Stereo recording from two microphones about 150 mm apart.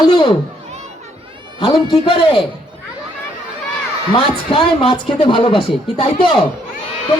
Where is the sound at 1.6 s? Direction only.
35° left (ahead or behind).